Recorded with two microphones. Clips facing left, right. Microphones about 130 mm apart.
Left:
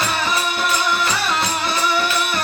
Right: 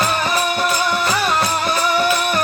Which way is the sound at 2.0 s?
45° right (ahead or behind).